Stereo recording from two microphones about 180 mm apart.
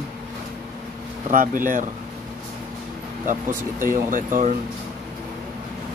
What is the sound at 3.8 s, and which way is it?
Speech, 50° right (ahead or behind).